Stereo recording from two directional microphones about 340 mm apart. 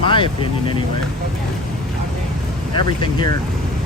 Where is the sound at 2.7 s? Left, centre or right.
Centre.